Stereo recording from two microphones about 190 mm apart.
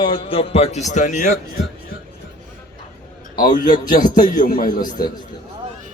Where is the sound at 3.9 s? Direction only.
45° left (ahead or behind).